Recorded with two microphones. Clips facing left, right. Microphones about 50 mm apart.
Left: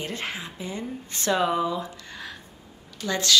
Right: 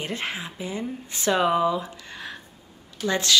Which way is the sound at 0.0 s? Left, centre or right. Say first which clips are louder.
Right 2 dB; right.